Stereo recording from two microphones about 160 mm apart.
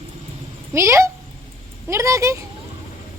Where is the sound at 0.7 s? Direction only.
20° right (ahead or behind).